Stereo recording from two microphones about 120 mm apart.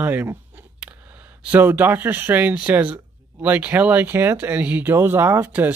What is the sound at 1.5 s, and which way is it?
Speech, 15° right (ahead or behind).